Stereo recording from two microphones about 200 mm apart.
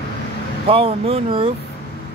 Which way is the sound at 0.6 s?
30° right (ahead or behind).